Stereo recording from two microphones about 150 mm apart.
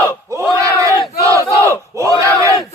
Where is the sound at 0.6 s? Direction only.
20° right (ahead or behind).